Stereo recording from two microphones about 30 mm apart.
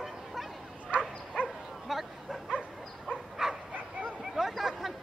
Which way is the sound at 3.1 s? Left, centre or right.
Left.